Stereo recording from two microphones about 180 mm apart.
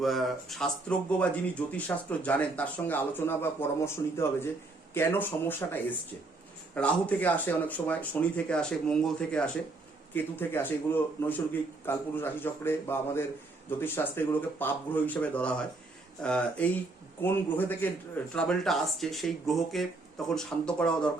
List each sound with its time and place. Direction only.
0.0 s speech: centre (ahead or behind)